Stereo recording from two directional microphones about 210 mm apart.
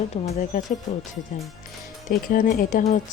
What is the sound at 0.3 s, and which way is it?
Speech, 40° left (ahead or behind).